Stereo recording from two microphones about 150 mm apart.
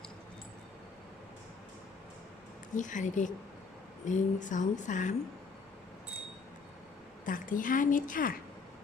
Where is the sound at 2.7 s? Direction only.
55° left (ahead or behind).